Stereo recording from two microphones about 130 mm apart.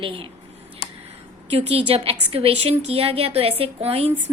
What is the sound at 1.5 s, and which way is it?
A woman's voice, 50° right (ahead or behind).